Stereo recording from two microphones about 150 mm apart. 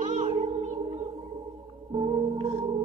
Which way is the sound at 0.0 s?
55° right (ahead or behind).